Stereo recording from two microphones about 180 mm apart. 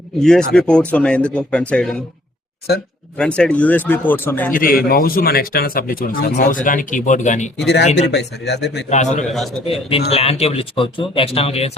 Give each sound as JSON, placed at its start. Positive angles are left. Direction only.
{"t": 0.2, "sound": "speech", "side_deg": 5}
{"t": 3.2, "sound": "speech", "side_deg": 5}
{"t": 4.5, "sound": "speech", "side_deg": 55}
{"t": 7.6, "sound": "speech", "side_deg": 70}
{"t": 8.9, "sound": "speech", "side_deg": 40}
{"t": 9.2, "sound": "a man's voice", "side_deg": 0}
{"t": 9.6, "sound": "speech", "side_deg": 30}